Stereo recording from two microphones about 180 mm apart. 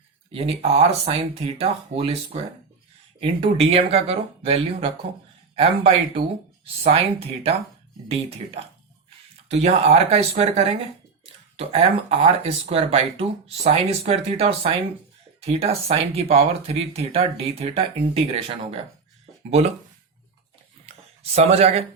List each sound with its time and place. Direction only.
0.3 s speech: 35° right (ahead or behind)
20.9 s a sound: 35° right (ahead or behind)
21.3 s speech: 35° right (ahead or behind)